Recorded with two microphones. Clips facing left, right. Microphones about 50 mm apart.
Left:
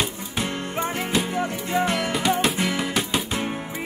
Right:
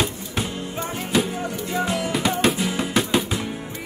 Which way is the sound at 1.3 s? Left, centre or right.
Left.